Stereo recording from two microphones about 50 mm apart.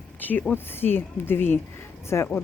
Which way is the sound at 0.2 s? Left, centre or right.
Left.